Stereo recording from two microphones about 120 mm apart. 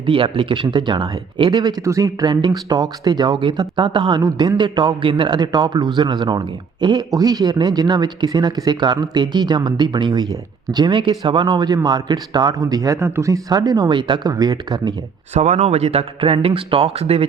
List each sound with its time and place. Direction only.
0.0 s speech: 45° right (ahead or behind)
15.3 s speech: 70° right (ahead or behind)